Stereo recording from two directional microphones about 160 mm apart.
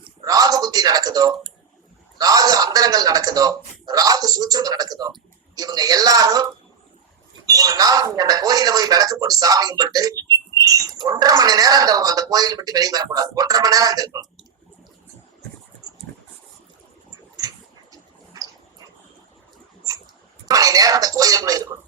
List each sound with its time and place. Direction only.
0.3 s typing: 25° right (ahead or behind)
2.1 s a sound: 25° right (ahead or behind)
5.5 s speech: 25° right (ahead or behind)
20.5 s speech: 20° right (ahead or behind)